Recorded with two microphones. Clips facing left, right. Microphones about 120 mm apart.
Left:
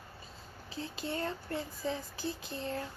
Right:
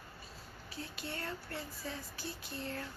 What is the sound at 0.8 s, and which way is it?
Speech, 25° left (ahead or behind).